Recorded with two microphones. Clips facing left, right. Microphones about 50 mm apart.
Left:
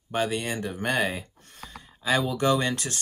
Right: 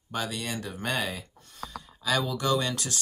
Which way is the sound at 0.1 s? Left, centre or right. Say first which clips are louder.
Left 5 dB; left.